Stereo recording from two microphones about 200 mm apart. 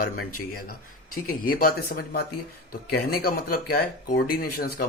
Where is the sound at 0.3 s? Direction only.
90° left.